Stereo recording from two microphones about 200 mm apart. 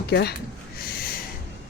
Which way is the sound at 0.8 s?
50° left (ahead or behind).